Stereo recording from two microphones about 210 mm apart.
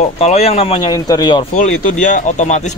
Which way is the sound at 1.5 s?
40° left (ahead or behind).